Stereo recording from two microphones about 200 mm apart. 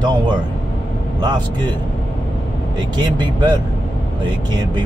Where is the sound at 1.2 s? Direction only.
20° right (ahead or behind).